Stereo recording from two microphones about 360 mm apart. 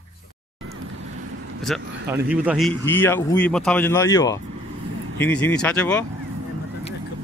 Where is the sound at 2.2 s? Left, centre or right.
Centre.